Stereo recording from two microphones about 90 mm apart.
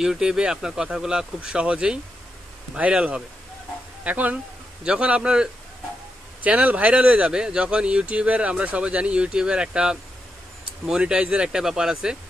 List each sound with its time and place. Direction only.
0.0 s speech: 5° right (ahead or behind)